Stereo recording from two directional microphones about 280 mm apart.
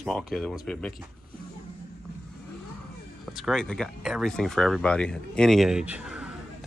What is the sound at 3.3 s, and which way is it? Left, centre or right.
Speech, centre.